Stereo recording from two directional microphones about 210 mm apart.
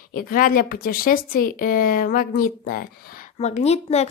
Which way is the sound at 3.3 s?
30° left (ahead or behind).